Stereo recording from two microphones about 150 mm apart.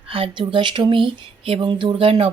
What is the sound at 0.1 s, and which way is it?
Speech, 35° right (ahead or behind).